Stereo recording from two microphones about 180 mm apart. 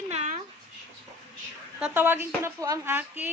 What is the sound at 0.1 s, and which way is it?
Dog, 40° right (ahead or behind).